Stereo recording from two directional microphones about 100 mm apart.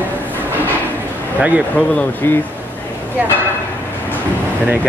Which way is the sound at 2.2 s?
25° left (ahead or behind).